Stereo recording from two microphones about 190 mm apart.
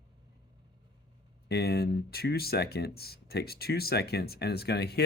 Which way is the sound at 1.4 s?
60° left (ahead or behind).